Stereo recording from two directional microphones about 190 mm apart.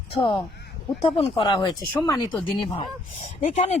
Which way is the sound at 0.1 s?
30° left (ahead or behind).